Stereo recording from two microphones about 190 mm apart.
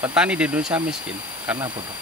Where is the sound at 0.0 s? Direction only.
5° right (ahead or behind).